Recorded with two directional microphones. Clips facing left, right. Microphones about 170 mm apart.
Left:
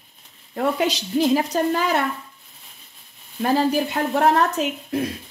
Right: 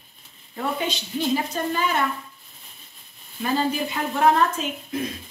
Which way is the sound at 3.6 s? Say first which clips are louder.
Left 3 dB; 70° left (ahead or behind).